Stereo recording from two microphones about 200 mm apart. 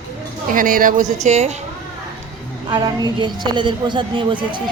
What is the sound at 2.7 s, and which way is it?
Speech, 20° right (ahead or behind).